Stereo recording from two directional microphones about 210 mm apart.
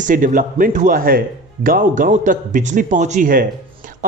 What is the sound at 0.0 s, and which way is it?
Speech, 40° right (ahead or behind).